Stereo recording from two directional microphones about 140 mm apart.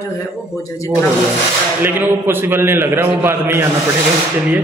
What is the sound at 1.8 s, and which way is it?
A man's voice, 15° right (ahead or behind).